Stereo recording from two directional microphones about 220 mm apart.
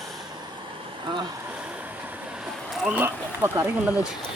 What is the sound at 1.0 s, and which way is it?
Speech, 20° right (ahead or behind).